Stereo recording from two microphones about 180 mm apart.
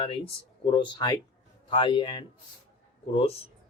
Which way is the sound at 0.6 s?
25° left (ahead or behind).